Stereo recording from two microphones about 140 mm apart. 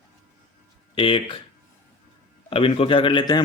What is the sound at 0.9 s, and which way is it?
Speech, 40° left (ahead or behind).